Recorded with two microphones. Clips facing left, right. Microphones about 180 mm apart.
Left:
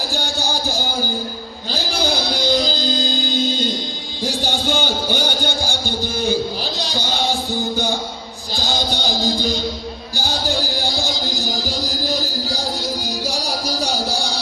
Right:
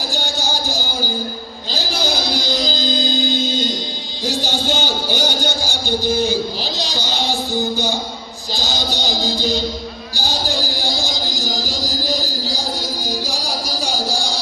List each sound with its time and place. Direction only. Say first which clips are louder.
4.4 s music: left 3 dB; 55° left (ahead or behind)
8.6 s music: left 1 dB; 55° left (ahead or behind)